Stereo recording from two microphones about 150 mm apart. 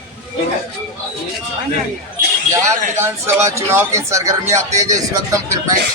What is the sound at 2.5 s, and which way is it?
Speech, 20° right (ahead or behind).